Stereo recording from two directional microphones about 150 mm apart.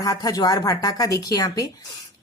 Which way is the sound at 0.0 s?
25° left (ahead or behind).